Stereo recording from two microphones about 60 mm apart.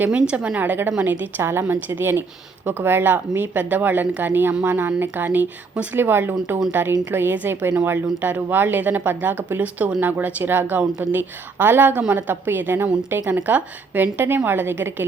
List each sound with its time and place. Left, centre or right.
0.1 s a woman's voice: centre
1.4 s a woman's voice: right